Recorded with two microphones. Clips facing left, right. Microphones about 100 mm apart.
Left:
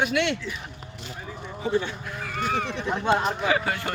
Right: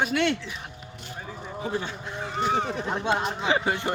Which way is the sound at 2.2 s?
20° right (ahead or behind).